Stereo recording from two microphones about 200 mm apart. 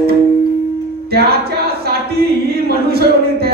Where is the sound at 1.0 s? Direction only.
50° right (ahead or behind).